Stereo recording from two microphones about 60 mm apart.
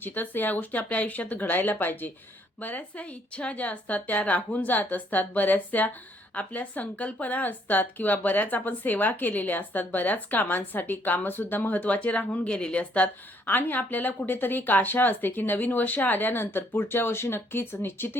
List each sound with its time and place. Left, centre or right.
0.0 s a woman's voice: left
13.4 s speech: left